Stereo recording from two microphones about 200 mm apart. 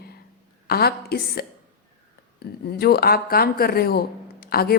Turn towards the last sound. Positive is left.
turn(degrees=50)  # may be behind; listen again after turning